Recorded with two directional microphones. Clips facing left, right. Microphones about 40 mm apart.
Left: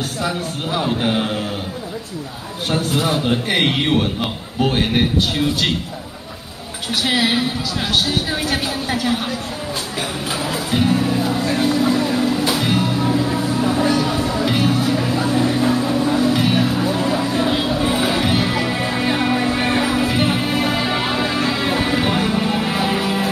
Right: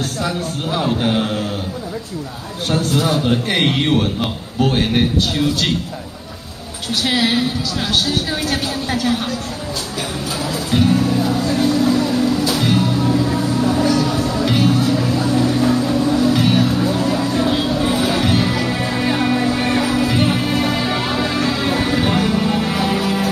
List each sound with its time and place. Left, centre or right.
0.2 s a man's voice: centre
2.7 s a man's voice: centre
7.0 s a man's voice: centre
10.3 s music: left
11.4 s music: left
14.7 s a sound: left
15.5 s music: centre
20.2 s music: centre